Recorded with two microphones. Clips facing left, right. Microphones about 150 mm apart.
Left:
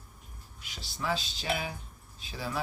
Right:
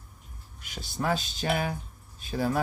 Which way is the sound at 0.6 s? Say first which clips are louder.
Right 6 dB; 50° right (ahead or behind).